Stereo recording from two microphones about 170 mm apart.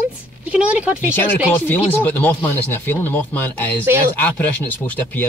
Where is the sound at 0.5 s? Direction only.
10° right (ahead or behind).